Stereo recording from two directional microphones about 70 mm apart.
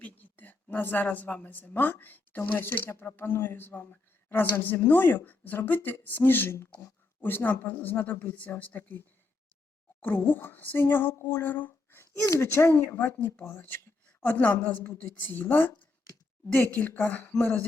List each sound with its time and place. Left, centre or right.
0.0 s a woman's voice: left
12.2 s speech: left
12.5 s speech: left
13.0 s speech: left